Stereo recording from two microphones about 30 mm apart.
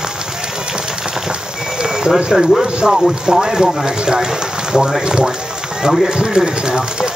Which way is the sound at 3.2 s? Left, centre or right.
Right.